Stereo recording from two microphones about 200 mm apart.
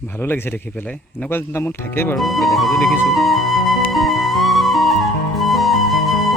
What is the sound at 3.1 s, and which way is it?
Flute, centre (ahead or behind).